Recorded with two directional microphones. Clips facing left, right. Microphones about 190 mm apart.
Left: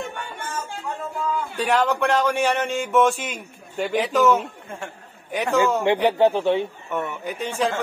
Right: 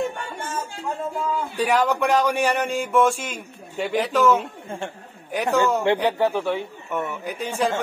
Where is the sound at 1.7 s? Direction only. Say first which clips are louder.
Even; 15° right (ahead or behind).